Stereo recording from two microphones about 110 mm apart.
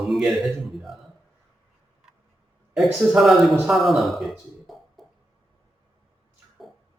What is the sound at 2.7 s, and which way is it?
Speech, 5° right (ahead or behind).